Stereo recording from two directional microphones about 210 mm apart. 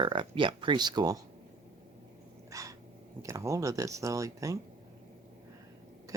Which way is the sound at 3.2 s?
15° right (ahead or behind).